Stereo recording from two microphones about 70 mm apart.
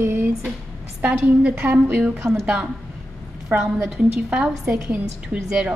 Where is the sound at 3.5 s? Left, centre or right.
Right.